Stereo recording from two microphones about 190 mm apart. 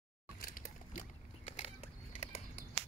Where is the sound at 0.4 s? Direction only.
45° left (ahead or behind).